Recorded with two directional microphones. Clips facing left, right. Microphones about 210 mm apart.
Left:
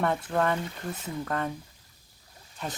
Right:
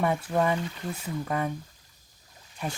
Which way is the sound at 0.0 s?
10° right (ahead or behind).